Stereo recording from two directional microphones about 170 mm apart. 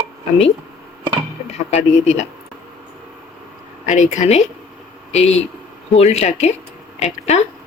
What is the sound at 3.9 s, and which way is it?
Speech, 40° left (ahead or behind).